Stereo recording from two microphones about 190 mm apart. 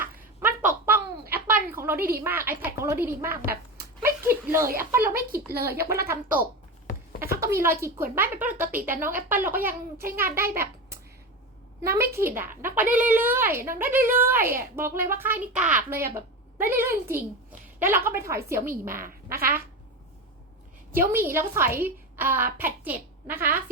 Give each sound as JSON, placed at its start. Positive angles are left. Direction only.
{"t": 0.7, "sound": "a sound", "side_deg": -10}
{"t": 2.2, "sound": "a child's voice", "side_deg": -10}
{"t": 4.0, "sound": "a sound", "side_deg": -15}
{"t": 4.8, "sound": "a child's voice", "side_deg": -10}
{"t": 5.0, "sound": "speech", "side_deg": -50}
{"t": 5.6, "sound": "a child's voice", "side_deg": -15}
{"t": 7.2, "sound": "a sound", "side_deg": -15}
{"t": 7.8, "sound": "a child's voice", "side_deg": -15}
{"t": 11.8, "sound": "a child's voice", "side_deg": -15}
{"t": 20.9, "sound": "a child's voice", "side_deg": -10}